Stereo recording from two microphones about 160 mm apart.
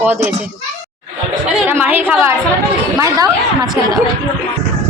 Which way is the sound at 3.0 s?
20° right (ahead or behind).